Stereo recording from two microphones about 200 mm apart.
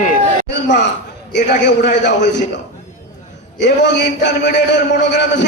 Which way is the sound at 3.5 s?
60° left (ahead or behind).